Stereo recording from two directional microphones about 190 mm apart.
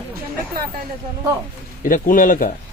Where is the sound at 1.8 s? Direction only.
45° left (ahead or behind).